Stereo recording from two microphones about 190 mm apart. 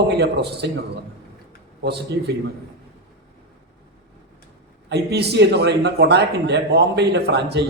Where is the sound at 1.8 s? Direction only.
60° right (ahead or behind).